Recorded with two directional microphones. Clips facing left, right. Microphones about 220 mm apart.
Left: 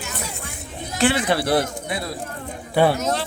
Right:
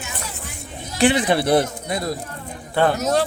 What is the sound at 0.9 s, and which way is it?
Speech, 15° right (ahead or behind).